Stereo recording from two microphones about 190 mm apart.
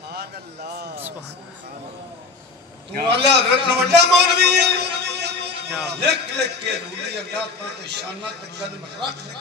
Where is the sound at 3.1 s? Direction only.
60° right (ahead or behind).